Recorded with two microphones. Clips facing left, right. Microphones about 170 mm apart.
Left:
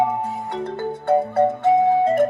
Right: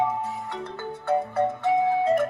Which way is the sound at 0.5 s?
30° left (ahead or behind).